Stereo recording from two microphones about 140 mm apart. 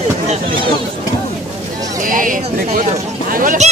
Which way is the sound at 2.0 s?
75° right (ahead or behind).